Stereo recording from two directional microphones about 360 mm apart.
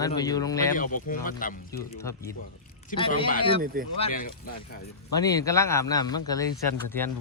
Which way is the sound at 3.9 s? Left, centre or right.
Left.